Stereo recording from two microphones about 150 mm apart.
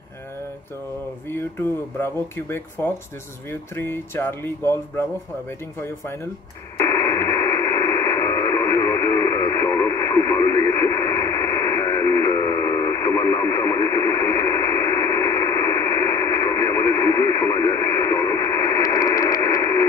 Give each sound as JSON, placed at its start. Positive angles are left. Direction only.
{"t": 1.3, "sound": "speech", "side_deg": 15}
{"t": 6.8, "sound": "radio", "side_deg": 20}